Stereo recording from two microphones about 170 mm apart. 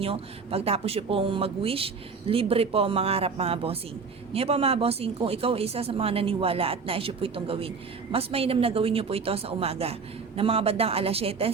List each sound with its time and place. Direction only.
0.0 s speech: 35° right (ahead or behind)